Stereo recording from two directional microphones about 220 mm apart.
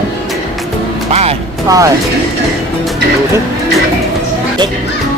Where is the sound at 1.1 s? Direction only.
25° right (ahead or behind).